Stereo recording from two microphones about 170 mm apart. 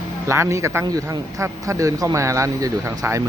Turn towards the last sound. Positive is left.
turn(degrees=-15)  # may be behind; listen again after turning